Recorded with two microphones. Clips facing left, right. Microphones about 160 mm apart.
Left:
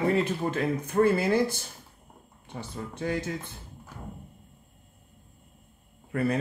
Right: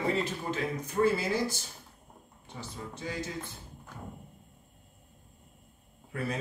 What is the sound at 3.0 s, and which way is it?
Speech, 55° left (ahead or behind).